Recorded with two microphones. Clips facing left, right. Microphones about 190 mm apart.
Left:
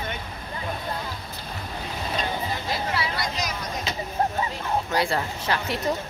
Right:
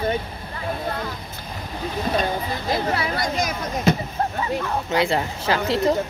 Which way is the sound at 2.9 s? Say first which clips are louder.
Right 4 dB; 50° right (ahead or behind).